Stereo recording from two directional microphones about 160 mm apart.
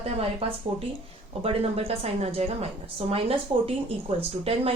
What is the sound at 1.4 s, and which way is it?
A woman's voice, 40° right (ahead or behind).